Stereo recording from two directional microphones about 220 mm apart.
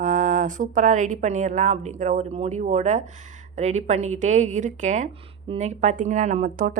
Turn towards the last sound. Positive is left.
turn(degrees=-35)  # may be behind; listen again after turning